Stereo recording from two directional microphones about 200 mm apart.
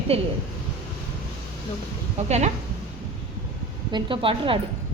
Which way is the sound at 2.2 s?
35° right (ahead or behind).